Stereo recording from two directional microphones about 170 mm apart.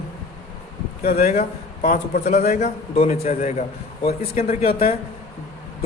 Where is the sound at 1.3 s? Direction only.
45° left (ahead or behind).